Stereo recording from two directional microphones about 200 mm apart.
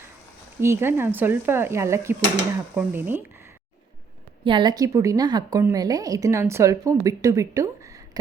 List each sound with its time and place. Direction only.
0.6 s a woman's voice: 10° right (ahead or behind)
4.4 s a woman's voice: 25° right (ahead or behind)